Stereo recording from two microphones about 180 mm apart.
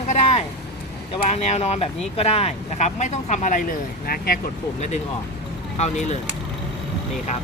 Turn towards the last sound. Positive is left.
turn(degrees=40)  # may be behind; listen again after turning